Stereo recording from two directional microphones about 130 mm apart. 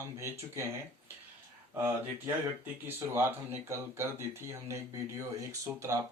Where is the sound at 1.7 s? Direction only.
15° right (ahead or behind).